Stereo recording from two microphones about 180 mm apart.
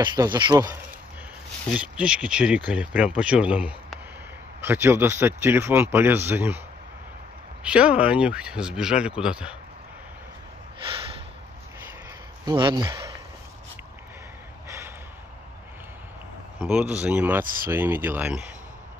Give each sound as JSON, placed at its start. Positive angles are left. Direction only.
{"t": 0.0, "sound": "speech", "side_deg": -25}
{"t": 1.7, "sound": "speech", "side_deg": -5}
{"t": 7.6, "sound": "speech", "side_deg": -5}
{"t": 12.4, "sound": "speech", "side_deg": -25}
{"t": 16.6, "sound": "speech", "side_deg": -5}